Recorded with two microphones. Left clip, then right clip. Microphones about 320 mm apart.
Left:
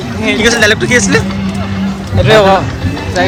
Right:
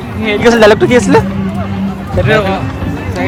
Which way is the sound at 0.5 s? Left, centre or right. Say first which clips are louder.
Right 6 dB; centre.